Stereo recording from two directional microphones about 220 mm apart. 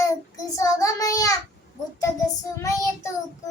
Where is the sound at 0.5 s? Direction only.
15° left (ahead or behind).